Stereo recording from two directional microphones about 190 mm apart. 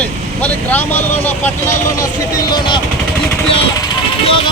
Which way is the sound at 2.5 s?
25° left (ahead or behind).